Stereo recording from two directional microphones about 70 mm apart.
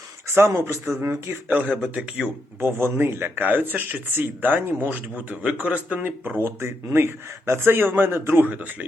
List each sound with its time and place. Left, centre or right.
0.3 s speech: right
0.9 s speech: right
1.5 s speech: centre
2.0 s speech: centre
2.6 s speech: right
6.4 s speech: right